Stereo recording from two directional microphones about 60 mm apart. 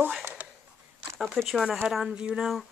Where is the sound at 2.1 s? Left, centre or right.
Centre.